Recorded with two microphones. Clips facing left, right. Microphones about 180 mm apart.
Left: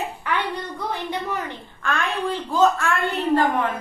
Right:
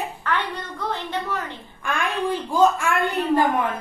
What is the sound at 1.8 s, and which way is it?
A woman's voice, 10° right (ahead or behind).